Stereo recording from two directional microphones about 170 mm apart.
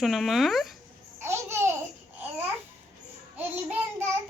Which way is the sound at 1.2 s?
15° right (ahead or behind).